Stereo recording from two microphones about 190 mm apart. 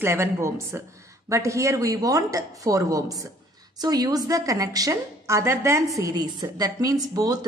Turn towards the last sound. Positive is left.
turn(degrees=-20)  # may be behind; listen again after turning